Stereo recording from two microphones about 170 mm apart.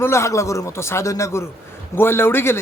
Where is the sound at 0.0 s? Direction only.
15° left (ahead or behind).